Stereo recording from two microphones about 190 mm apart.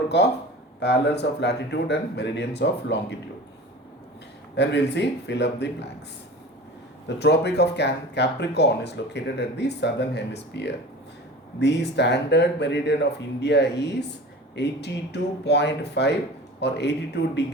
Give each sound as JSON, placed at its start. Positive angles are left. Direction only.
{"t": 0.1, "sound": "speech", "side_deg": 65}
{"t": 4.5, "sound": "speech", "side_deg": 65}
{"t": 7.2, "sound": "speech", "side_deg": 60}